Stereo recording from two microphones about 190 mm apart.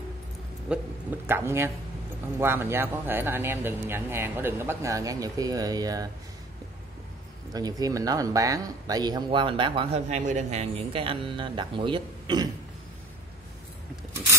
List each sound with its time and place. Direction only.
0.7 s a man's voice: 5° right (ahead or behind)
7.5 s speech: 20° right (ahead or behind)